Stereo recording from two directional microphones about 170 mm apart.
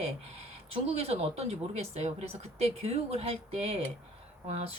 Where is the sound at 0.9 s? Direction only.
35° right (ahead or behind).